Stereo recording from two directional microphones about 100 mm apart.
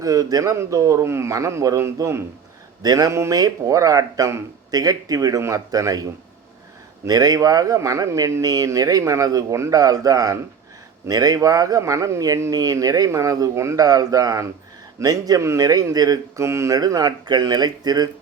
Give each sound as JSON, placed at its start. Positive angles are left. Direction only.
{"t": 0.0, "sound": "speech", "side_deg": -35}
{"t": 2.8, "sound": "speech", "side_deg": -40}